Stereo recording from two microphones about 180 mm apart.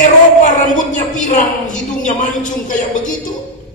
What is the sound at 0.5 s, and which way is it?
A woman's voice, 45° left (ahead or behind).